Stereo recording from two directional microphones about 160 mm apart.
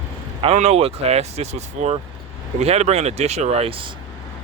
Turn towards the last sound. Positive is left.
turn(degrees=-35)  # may be behind; listen again after turning